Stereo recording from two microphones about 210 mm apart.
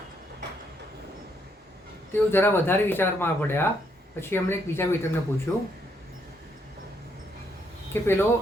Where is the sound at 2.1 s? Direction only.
10° left (ahead or behind).